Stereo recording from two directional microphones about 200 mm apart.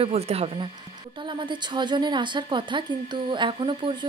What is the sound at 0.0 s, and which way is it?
A woman's voice, 30° right (ahead or behind).